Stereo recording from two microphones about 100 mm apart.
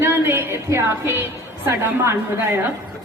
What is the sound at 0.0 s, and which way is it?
Music, 25° right (ahead or behind).